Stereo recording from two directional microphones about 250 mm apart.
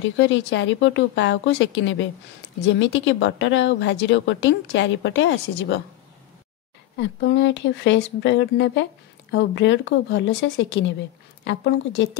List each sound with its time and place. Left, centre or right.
0.0 s a woman's voice: left
7.0 s a woman's voice: left